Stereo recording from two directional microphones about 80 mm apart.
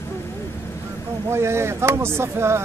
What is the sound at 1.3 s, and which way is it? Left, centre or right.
Speech, right.